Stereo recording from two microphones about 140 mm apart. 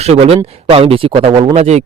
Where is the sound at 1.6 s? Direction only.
55° right (ahead or behind).